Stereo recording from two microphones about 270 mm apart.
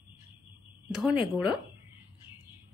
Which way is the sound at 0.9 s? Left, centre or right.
Centre.